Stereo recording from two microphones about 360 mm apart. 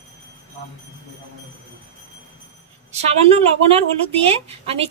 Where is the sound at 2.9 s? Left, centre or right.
Centre.